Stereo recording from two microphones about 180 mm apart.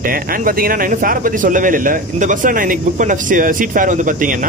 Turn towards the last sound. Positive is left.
turn(degrees=-45)  # may be behind; listen again after turning